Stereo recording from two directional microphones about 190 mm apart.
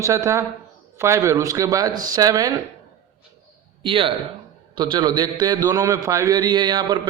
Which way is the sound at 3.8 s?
30° right (ahead or behind).